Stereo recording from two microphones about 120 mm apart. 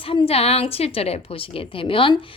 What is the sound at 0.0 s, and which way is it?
A woman's voice, 50° left (ahead or behind).